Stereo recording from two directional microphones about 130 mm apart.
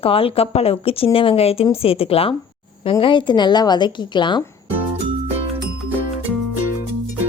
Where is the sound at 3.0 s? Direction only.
35° left (ahead or behind).